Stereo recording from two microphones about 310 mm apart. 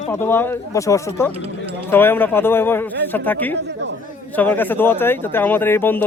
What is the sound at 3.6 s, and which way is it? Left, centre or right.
Speech, right.